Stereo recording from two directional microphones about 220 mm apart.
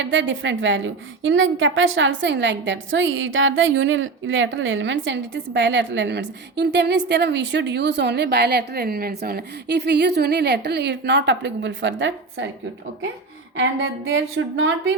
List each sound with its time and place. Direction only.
0.0 s a woman's voice: 55° right (ahead or behind)
13.6 s a woman's voice: 55° right (ahead or behind)